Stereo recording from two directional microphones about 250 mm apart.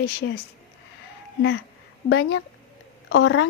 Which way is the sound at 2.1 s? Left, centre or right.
Left.